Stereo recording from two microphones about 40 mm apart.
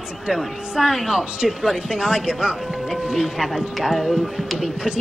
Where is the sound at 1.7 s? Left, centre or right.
Centre.